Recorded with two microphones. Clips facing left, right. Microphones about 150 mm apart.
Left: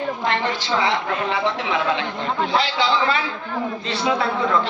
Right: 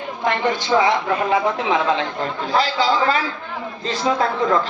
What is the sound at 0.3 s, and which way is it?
A woman's voice, 50° right (ahead or behind).